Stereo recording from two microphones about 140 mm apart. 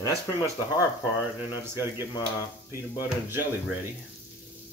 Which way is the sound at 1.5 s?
25° left (ahead or behind).